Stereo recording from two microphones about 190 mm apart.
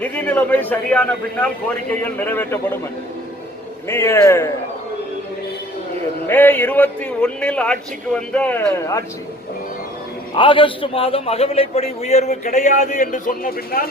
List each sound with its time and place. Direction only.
0.0 s a man's voice: 10° left (ahead or behind)
3.8 s a man's voice: 15° left (ahead or behind)
6.2 s a man's voice: 10° left (ahead or behind)
10.3 s a man's voice: 25° left (ahead or behind); by 13.8 s 50° left (ahead or behind)